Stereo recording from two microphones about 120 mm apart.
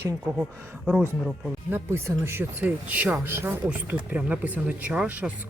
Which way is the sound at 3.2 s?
20° right (ahead or behind).